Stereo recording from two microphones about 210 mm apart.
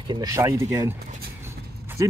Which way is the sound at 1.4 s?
10° right (ahead or behind).